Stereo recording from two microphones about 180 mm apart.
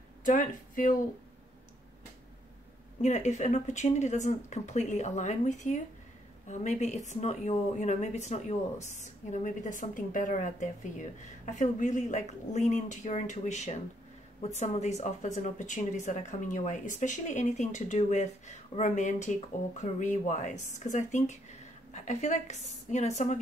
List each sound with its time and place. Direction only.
0.2 s speech: 45° left (ahead or behind)
3.0 s speech: 40° left (ahead or behind)